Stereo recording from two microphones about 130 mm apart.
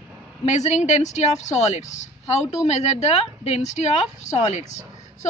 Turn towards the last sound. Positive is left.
turn(degrees=65)  # may be behind; listen again after turning